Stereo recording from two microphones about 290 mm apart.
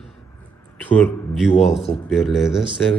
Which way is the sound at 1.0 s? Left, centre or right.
Centre.